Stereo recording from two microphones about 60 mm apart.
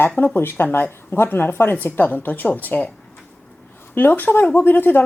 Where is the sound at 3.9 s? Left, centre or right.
Left.